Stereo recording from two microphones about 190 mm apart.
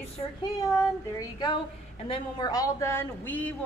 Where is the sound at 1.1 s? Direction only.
25° left (ahead or behind).